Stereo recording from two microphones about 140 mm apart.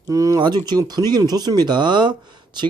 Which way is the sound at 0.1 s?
25° right (ahead or behind).